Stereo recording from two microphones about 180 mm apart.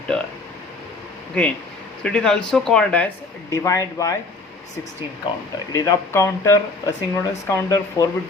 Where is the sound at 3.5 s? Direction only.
20° left (ahead or behind).